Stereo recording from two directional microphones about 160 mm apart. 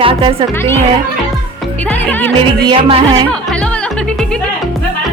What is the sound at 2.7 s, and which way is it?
Music, 35° right (ahead or behind).